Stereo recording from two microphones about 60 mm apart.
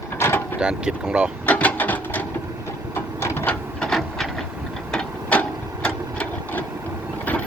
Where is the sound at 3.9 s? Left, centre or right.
Centre.